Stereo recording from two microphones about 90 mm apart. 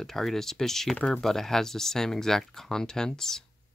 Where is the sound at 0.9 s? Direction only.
15° left (ahead or behind).